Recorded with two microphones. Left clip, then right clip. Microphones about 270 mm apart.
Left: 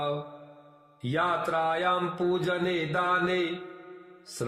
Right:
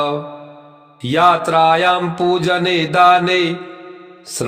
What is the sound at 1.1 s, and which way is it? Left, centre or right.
Mantra, right.